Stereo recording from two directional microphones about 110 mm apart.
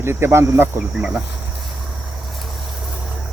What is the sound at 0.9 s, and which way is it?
Speech, 10° right (ahead or behind).